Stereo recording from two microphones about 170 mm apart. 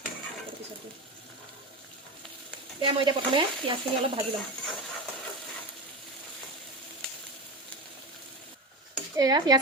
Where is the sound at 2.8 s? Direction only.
30° right (ahead or behind).